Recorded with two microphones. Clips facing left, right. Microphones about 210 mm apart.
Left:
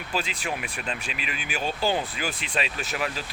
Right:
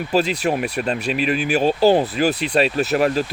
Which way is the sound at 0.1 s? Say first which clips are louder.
Right 11 dB; 40° right (ahead or behind).